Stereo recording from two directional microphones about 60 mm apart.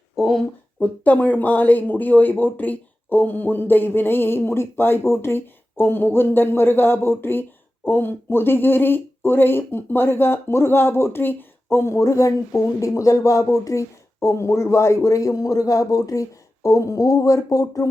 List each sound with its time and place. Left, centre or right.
0.2 s speech: centre
0.8 s speech: left
16.6 s speech: left